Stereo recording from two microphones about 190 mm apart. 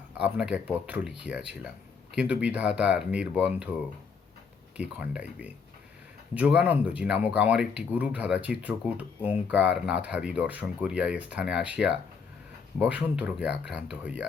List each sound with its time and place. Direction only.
0.2 s speech: 5° right (ahead or behind)
4.8 s speech: 5° right (ahead or behind)